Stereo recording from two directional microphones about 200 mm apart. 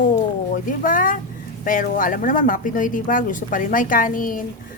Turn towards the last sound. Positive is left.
turn(degrees=45)  # may be behind; listen again after turning